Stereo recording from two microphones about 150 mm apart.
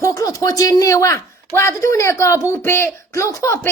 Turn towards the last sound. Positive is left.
turn(degrees=20)  # may be behind; listen again after turning